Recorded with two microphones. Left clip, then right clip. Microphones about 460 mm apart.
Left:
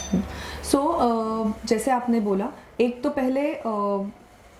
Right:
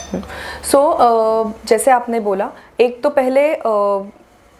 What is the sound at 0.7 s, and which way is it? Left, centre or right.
A woman's voice, right.